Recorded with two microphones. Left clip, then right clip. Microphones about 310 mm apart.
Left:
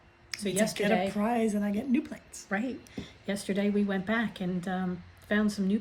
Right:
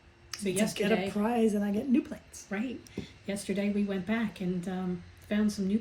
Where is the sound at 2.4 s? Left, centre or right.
Centre.